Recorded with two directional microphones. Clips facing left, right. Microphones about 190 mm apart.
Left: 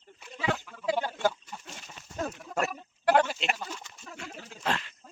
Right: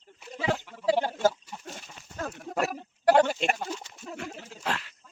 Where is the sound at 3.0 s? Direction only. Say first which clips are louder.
Right 3 dB; 35° right (ahead or behind).